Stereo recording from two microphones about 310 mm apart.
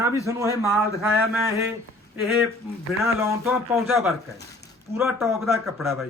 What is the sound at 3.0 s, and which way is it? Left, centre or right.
A man's voice, centre.